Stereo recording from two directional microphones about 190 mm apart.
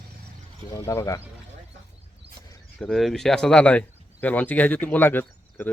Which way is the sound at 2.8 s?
Centre (ahead or behind).